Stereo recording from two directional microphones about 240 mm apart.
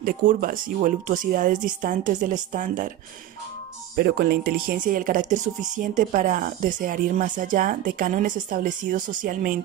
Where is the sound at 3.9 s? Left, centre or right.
Right.